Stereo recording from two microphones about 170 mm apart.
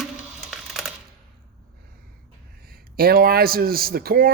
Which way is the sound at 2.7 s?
60° right (ahead or behind).